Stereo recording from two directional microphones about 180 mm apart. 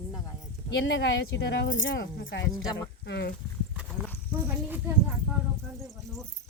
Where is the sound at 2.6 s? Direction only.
15° left (ahead or behind).